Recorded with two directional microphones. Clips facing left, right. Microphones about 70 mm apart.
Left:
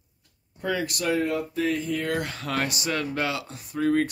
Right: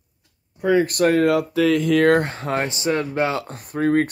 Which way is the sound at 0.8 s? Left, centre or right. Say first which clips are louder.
Right 9 dB; right.